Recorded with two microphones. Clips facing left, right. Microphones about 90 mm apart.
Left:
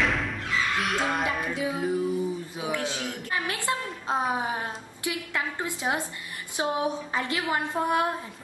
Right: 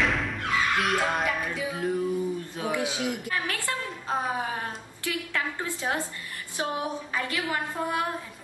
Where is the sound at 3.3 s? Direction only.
20° left (ahead or behind).